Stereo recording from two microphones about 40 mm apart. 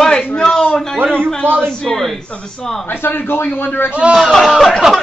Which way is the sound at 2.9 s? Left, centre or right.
Left.